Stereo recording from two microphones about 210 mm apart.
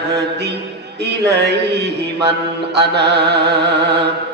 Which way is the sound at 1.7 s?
55° right (ahead or behind).